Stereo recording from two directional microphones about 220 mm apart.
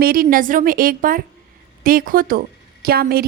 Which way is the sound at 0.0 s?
40° right (ahead or behind).